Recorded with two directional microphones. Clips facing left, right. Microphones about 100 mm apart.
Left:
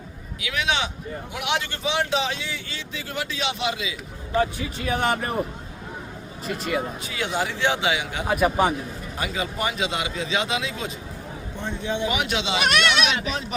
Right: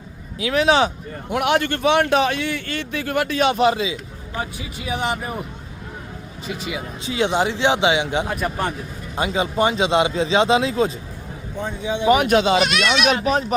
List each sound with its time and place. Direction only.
0.4 s speech: 35° right (ahead or behind)
1.3 s a man's voice: 50° right (ahead or behind)
4.4 s speech: 15° right (ahead or behind)
6.5 s speech: centre (ahead or behind)
7.0 s a man's voice: 25° right (ahead or behind)
8.3 s a man's voice: 5° left (ahead or behind)
9.1 s a man's voice: 25° right (ahead or behind)
11.6 s speech: 10° right (ahead or behind)
12.0 s speech: 45° right (ahead or behind)